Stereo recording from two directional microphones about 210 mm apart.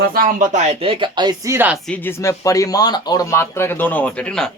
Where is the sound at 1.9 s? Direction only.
10° left (ahead or behind).